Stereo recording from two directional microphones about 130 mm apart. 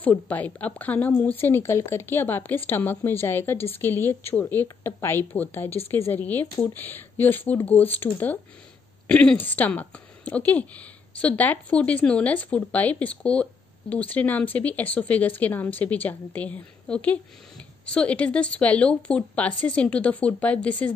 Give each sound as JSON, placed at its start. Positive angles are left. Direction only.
{"t": 0.0, "sound": "speech", "side_deg": 10}